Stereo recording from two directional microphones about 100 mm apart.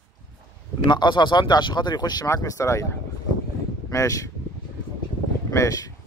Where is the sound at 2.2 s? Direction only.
30° left (ahead or behind).